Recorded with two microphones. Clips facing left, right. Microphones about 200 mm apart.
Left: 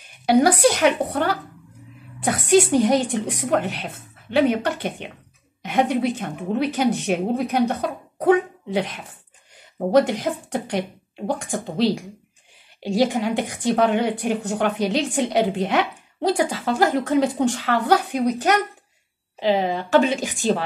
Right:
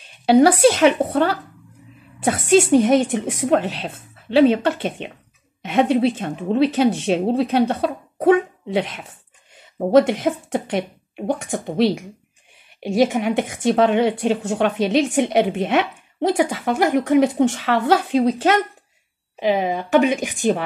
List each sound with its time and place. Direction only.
0.3 s a woman's voice: 25° right (ahead or behind)
19.6 s a woman's voice: 20° right (ahead or behind)